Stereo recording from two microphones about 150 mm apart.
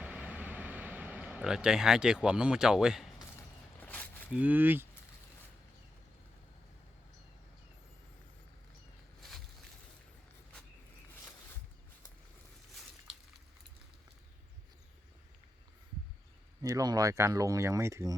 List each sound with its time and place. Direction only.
0.0 s vehicle: 10° right (ahead or behind)
3.8 s a sound: 10° left (ahead or behind)
4.4 s speech: 10° right (ahead or behind)
16.6 s speech: 25° right (ahead or behind)